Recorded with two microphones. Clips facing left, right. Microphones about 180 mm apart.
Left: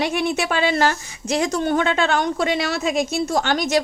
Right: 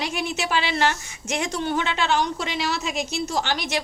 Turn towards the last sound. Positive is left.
turn(degrees=45)  # may be behind; listen again after turning